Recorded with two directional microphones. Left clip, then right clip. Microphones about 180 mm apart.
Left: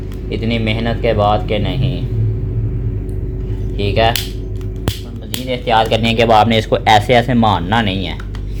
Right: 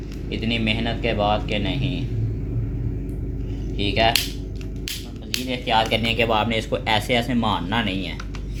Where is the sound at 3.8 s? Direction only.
35° left (ahead or behind).